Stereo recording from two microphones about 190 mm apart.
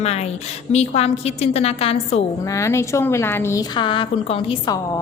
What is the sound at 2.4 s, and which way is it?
A woman's voice, 15° left (ahead or behind).